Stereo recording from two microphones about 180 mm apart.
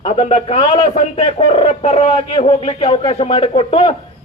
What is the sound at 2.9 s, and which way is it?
Speech, 35° left (ahead or behind).